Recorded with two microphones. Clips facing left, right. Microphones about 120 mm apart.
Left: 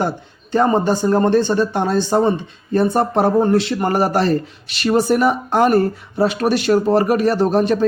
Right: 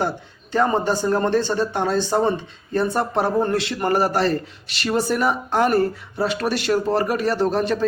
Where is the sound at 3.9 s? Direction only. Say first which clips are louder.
Left 1 dB; 50° left (ahead or behind).